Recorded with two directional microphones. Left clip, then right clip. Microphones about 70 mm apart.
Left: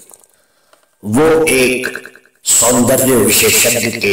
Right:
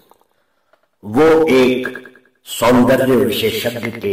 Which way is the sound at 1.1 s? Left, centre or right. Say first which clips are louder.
Even; left.